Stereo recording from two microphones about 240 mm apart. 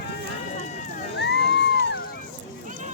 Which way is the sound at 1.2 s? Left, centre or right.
Left.